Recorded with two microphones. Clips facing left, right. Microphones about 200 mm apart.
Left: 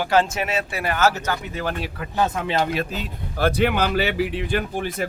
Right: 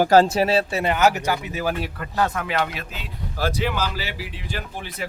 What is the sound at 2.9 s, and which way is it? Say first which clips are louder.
A man's voice: left 4 dB; 55° left (ahead or behind).